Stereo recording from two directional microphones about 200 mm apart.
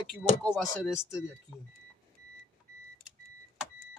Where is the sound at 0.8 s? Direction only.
Centre (ahead or behind).